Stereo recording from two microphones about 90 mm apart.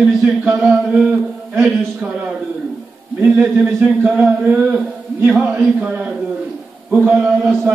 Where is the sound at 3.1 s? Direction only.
25° right (ahead or behind).